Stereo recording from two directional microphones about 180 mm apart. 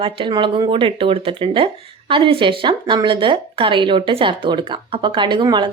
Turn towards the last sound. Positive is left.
turn(degrees=-25)  # may be behind; listen again after turning